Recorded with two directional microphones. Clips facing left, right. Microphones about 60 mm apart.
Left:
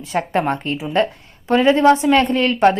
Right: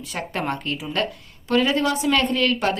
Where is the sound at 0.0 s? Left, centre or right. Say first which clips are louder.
Left 8 dB; left.